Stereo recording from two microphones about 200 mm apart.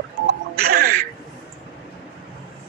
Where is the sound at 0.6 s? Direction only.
50° right (ahead or behind).